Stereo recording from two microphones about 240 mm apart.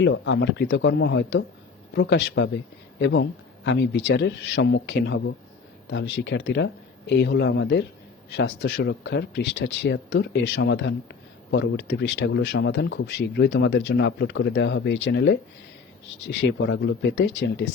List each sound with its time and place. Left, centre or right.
0.0 s speech: left